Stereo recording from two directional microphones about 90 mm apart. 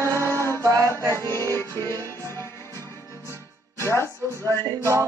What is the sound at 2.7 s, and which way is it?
Music, 35° right (ahead or behind).